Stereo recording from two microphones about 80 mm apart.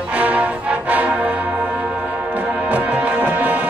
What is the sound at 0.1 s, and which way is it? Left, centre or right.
Music, centre.